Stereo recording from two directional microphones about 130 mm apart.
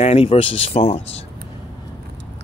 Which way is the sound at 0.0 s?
50° left (ahead or behind).